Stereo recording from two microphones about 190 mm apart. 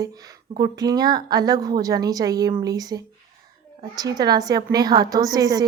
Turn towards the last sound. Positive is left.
turn(degrees=-20)  # may be behind; listen again after turning